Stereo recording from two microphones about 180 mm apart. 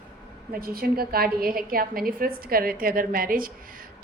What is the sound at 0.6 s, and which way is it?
A woman's voice, 55° right (ahead or behind).